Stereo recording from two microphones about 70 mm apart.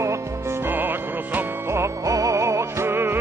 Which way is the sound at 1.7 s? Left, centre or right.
Right.